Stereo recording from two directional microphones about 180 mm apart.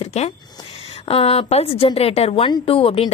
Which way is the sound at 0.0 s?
35° left (ahead or behind).